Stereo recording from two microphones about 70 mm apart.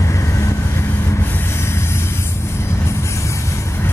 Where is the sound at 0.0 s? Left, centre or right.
Left.